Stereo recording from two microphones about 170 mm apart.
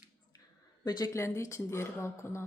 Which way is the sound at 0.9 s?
25° left (ahead or behind).